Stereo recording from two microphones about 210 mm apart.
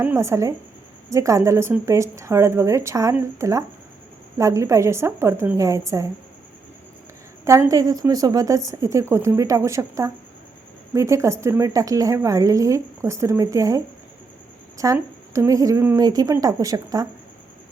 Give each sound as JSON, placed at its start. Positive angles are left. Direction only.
{"t": 0.0, "sound": "a woman's voice", "side_deg": -10}
{"t": 7.4, "sound": "a woman's voice", "side_deg": -15}